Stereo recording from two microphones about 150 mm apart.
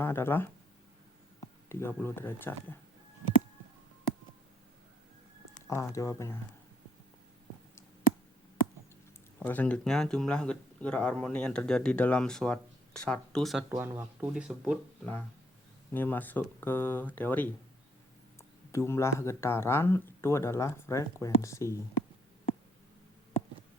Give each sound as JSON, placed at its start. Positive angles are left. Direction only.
{"t": 0.0, "sound": "speech", "side_deg": 15}
{"t": 5.6, "sound": "speech", "side_deg": 20}
{"t": 9.4, "sound": "speech", "side_deg": 10}
{"t": 13.7, "sound": "speech", "side_deg": -15}
{"t": 15.9, "sound": "speech", "side_deg": 15}
{"t": 18.7, "sound": "speech", "side_deg": 15}